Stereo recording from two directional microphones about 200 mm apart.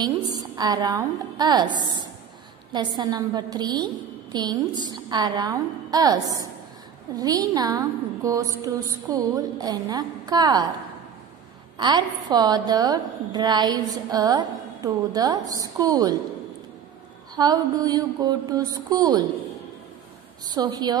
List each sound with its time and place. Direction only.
0.0 s a woman's voice: 20° right (ahead or behind)
11.8 s a woman's voice: 20° right (ahead or behind)
17.4 s a woman's voice: 20° right (ahead or behind)
20.4 s a woman's voice: 20° right (ahead or behind)